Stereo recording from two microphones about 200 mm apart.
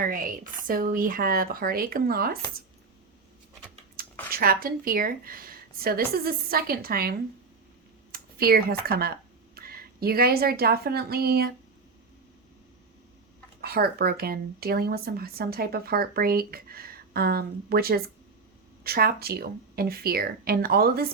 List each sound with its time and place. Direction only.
0.0 s speech: 45° right (ahead or behind)
4.3 s a woman's voice: 50° right (ahead or behind)
13.6 s speech: 50° right (ahead or behind)